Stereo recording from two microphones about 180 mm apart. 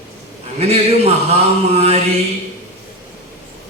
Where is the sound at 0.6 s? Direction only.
35° right (ahead or behind).